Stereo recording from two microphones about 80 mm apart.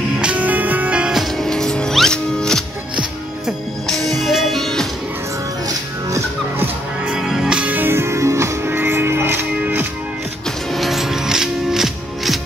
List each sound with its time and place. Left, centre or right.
0.2 s music: centre
1.2 s music: centre
3.8 s music: centre
5.7 s music: right
7.1 s music: centre; by 9.8 s right
10.7 s music: centre